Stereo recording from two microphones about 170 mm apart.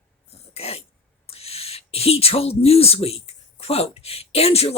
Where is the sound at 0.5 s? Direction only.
35° left (ahead or behind).